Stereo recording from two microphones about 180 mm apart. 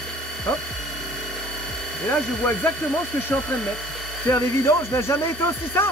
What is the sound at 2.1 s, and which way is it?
Speech, 10° left (ahead or behind).